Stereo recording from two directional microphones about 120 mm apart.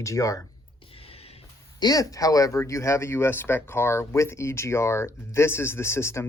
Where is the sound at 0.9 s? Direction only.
55° left (ahead or behind).